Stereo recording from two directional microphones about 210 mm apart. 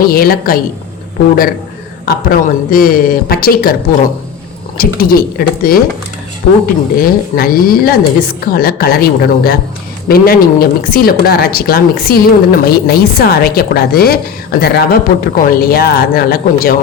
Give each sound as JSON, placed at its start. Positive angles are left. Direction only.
{"t": 0.0, "sound": "speech", "side_deg": 45}
{"t": 2.0, "sound": "speech", "side_deg": 45}
{"t": 7.0, "sound": "speech", "side_deg": 45}